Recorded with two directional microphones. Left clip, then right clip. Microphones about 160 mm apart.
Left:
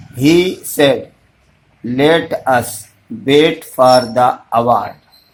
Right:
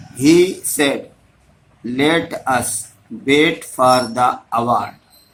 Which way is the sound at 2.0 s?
60° left (ahead or behind).